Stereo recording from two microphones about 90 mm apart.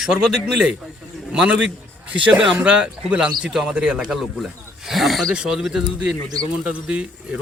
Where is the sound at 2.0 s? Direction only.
15° right (ahead or behind).